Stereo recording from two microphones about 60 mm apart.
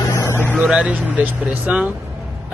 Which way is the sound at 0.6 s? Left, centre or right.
Centre.